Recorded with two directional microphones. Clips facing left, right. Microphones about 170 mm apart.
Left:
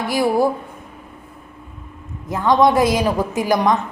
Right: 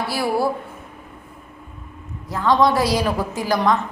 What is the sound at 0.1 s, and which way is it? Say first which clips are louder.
Speech: left 6 dB; 15° left (ahead or behind).